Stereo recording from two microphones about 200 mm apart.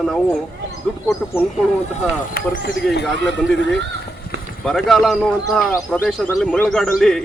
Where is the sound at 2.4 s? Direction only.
45° left (ahead or behind).